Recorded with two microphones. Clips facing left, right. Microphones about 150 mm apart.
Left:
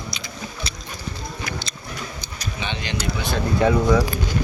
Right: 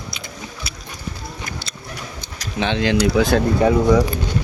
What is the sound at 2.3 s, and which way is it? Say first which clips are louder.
Speech: right 9 dB; 90° right.